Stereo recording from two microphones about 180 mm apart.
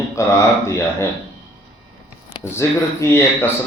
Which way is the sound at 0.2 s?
15° left (ahead or behind).